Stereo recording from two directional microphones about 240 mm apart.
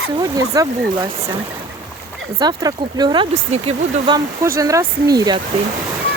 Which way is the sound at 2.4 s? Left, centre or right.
Centre.